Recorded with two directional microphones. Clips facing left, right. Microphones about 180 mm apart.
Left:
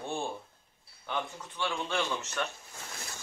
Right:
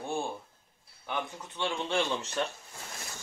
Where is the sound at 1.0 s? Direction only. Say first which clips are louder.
Even; 15° right (ahead or behind).